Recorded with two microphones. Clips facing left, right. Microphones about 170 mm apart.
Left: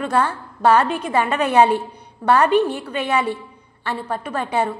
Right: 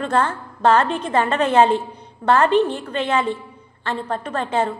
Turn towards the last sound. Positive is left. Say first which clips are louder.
# even
turn(degrees=15)  # may be behind; listen again after turning